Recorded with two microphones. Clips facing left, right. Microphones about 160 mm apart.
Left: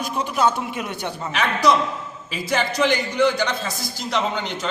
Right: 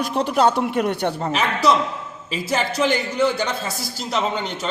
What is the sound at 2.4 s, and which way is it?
A man's voice, 5° right (ahead or behind).